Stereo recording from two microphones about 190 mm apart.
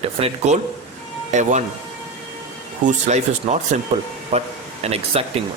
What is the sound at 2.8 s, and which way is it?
Speech, 40° right (ahead or behind).